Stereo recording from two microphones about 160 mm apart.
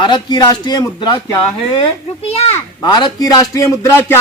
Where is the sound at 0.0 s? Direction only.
25° left (ahead or behind).